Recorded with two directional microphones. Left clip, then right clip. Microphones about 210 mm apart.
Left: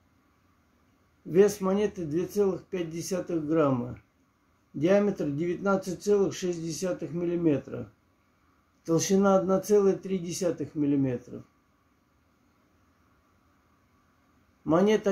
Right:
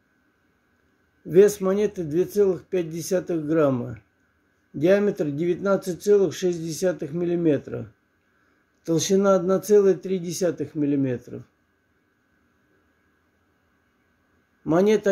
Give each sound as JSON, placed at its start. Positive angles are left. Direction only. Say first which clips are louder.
{"t": 1.3, "sound": "speech", "louder": "right 6 dB", "side_deg": -25}
{"t": 4.7, "sound": "speech", "louder": "right 5 dB", "side_deg": -25}
{"t": 8.8, "sound": "speech", "louder": "right 4 dB", "side_deg": -25}
{"t": 14.6, "sound": "a man's voice", "louder": "right 4 dB", "side_deg": -25}